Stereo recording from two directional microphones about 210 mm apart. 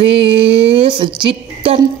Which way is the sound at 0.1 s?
25° right (ahead or behind).